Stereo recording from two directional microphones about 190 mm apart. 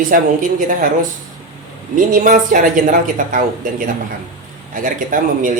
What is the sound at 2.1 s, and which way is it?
Speech, 45° right (ahead or behind).